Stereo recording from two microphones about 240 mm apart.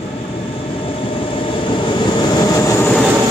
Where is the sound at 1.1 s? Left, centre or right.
Left.